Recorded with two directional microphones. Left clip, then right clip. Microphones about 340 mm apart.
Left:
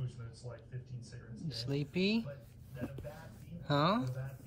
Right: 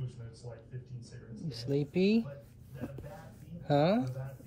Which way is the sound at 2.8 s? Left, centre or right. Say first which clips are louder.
Even; centre.